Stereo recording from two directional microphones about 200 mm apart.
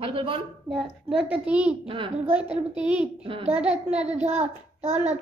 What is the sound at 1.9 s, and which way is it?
Speech, 25° right (ahead or behind).